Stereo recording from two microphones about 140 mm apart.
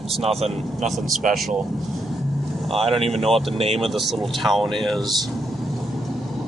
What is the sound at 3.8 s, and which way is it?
Speech, centre (ahead or behind).